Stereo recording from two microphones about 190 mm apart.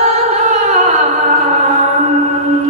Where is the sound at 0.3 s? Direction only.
35° right (ahead or behind).